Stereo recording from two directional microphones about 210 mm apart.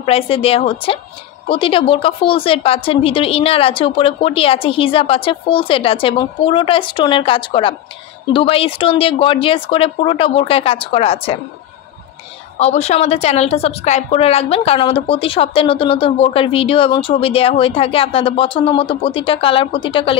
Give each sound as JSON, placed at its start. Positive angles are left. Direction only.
{"t": 0.0, "sound": "a woman's voice", "side_deg": 25}
{"t": 12.5, "sound": "a woman's voice", "side_deg": 30}